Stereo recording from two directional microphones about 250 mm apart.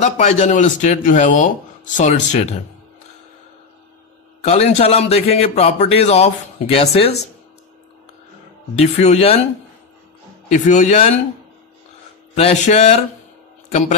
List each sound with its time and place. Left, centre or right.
0.0 s a man's voice: left
4.4 s a man's voice: left
8.7 s a man's voice: left
10.5 s a man's voice: left
12.4 s a man's voice: left